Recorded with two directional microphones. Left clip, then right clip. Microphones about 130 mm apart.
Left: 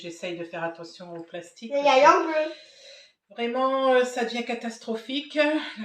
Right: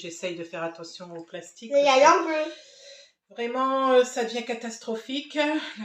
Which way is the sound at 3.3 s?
25° right (ahead or behind).